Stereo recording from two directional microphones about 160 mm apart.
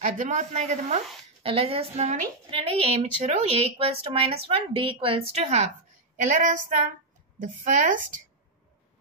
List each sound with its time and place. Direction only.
0.0 s a woman's voice: 50° right (ahead or behind)